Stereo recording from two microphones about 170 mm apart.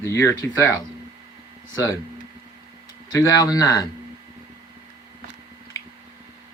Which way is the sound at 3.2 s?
20° left (ahead or behind).